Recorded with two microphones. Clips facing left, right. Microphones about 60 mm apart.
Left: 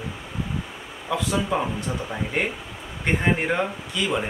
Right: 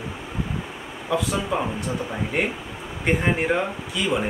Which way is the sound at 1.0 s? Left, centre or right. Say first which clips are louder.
Even; centre.